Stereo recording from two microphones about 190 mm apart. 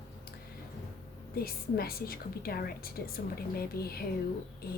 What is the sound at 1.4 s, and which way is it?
A woman's voice, 55° left (ahead or behind).